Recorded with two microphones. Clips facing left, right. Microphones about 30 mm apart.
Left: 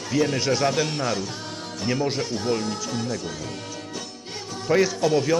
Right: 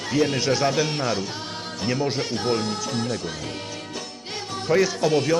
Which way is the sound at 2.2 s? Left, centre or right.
Right.